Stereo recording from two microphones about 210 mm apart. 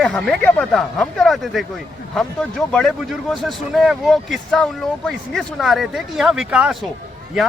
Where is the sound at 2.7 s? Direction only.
Centre (ahead or behind).